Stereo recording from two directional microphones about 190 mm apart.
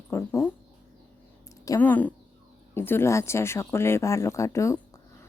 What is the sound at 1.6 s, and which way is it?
Speech, 15° left (ahead or behind).